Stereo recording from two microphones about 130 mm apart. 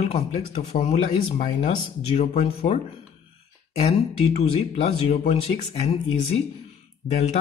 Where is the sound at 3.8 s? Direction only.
55° left (ahead or behind).